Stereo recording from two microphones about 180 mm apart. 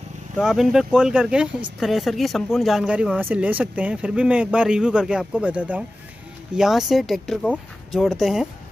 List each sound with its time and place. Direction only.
0.4 s speech: 5° right (ahead or behind)